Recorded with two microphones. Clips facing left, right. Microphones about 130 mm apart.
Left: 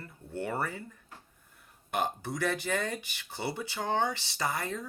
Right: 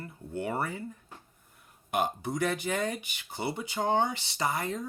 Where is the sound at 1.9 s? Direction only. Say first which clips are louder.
Right 2 dB; 15° right (ahead or behind).